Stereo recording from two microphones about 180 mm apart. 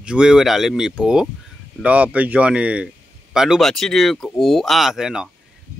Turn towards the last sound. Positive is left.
turn(degrees=-5)  # may be behind; listen again after turning